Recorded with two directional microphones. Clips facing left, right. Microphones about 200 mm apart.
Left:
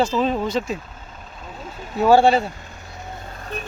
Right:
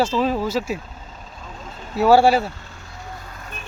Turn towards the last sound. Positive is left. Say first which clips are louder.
# left 5 dB
turn(degrees=35)  # may be behind; listen again after turning